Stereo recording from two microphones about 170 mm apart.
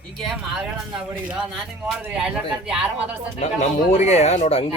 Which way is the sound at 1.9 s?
5° right (ahead or behind).